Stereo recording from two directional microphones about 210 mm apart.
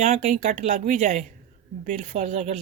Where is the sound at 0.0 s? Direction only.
40° right (ahead or behind).